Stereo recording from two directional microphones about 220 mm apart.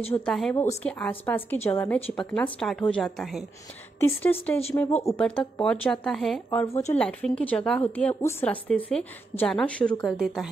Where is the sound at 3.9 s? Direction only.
10° left (ahead or behind).